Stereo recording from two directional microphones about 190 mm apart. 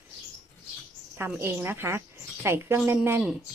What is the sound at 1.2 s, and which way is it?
Cutlery, 10° right (ahead or behind).